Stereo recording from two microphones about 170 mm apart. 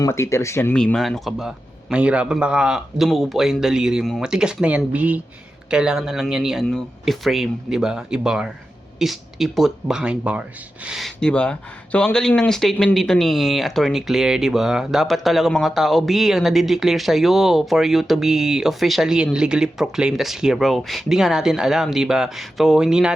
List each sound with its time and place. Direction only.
0.0 s speech: 15° left (ahead or behind); by 23.1 s 5° right (ahead or behind)